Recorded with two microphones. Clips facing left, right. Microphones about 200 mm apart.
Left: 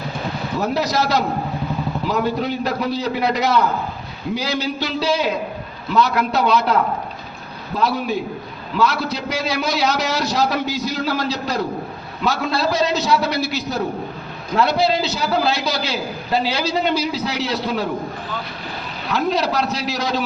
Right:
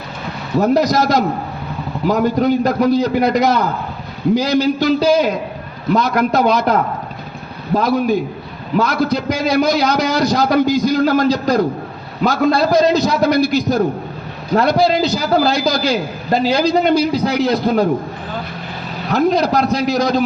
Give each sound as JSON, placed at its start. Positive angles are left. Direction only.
{"t": 0.6, "sound": "a man's voice", "side_deg": -45}
{"t": 7.8, "sound": "a man's voice", "side_deg": -45}
{"t": 19.1, "sound": "a man's voice", "side_deg": -45}